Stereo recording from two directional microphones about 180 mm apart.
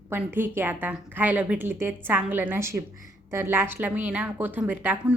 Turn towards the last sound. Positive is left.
turn(degrees=-10)  # may be behind; listen again after turning